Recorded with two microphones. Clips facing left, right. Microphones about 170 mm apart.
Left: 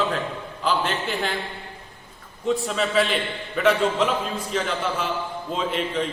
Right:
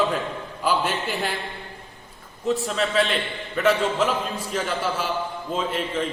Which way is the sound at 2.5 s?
Centre (ahead or behind).